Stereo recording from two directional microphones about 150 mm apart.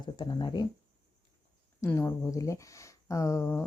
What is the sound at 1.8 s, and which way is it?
Speech, 20° left (ahead or behind).